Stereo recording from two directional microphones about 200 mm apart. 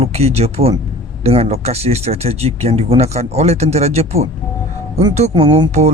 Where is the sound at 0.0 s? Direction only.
30° right (ahead or behind).